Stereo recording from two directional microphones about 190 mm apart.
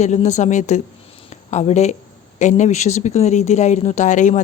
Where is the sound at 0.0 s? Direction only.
35° left (ahead or behind).